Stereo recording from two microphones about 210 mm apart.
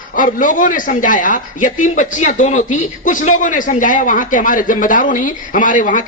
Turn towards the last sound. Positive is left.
turn(degrees=40)  # may be behind; listen again after turning